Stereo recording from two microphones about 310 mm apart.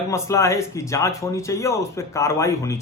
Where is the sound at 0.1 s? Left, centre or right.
Centre.